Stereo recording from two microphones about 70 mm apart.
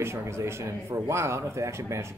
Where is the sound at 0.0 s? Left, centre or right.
Right.